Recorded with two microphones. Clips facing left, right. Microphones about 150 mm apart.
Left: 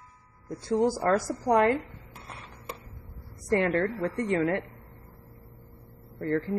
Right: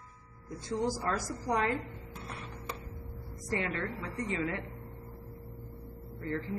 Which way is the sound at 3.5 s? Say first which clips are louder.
Left 9 dB; 55° left (ahead or behind).